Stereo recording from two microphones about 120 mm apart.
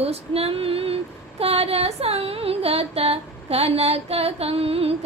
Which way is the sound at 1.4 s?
55° right (ahead or behind).